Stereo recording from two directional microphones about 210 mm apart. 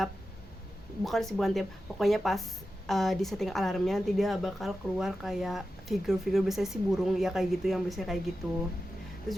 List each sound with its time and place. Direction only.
1.0 s speech: centre (ahead or behind)
9.3 s speech: centre (ahead or behind)